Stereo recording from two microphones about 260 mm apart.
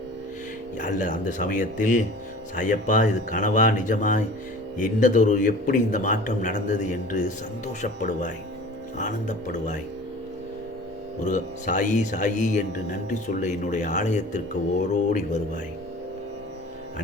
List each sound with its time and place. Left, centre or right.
0.8 s a man's voice: left
11.2 s a man's voice: left